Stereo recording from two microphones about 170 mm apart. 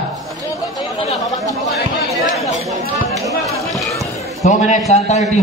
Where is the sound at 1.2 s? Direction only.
20° left (ahead or behind).